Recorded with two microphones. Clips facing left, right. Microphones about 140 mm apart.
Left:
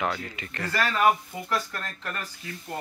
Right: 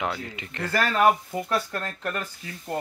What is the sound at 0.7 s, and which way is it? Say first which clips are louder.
Speech: right 2 dB; 50° right (ahead or behind).